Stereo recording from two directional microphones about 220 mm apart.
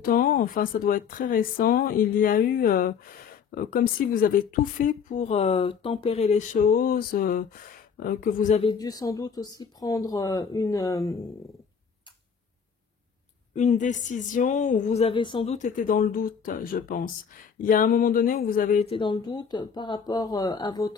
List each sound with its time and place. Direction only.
0.0 s speech: 40° left (ahead or behind)
8.7 s speech: 15° left (ahead or behind)
13.6 s speech: 35° left (ahead or behind)
15.5 s speech: 35° left (ahead or behind)
18.9 s speech: 20° left (ahead or behind)